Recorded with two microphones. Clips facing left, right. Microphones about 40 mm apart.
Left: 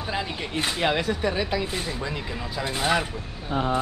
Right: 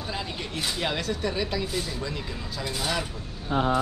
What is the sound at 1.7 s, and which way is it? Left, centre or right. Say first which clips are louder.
Speech: left 1 dB; left.